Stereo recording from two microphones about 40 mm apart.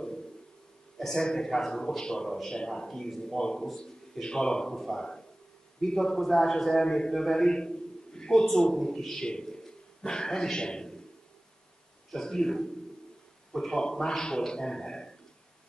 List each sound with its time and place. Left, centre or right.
0.9 s a man's voice: centre
12.1 s a man's voice: centre